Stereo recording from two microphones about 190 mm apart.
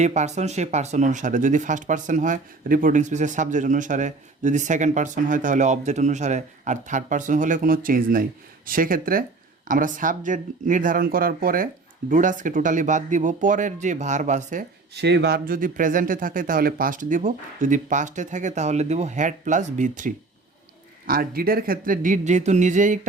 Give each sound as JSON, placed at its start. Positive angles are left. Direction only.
{"t": 0.0, "sound": "speech", "side_deg": -35}
{"t": 15.0, "sound": "speech", "side_deg": -60}